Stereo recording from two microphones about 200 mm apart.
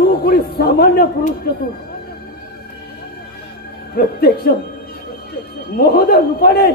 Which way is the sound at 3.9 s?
50° left (ahead or behind).